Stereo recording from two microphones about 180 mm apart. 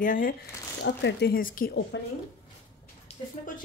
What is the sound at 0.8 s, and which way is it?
Speech, 75° left (ahead or behind).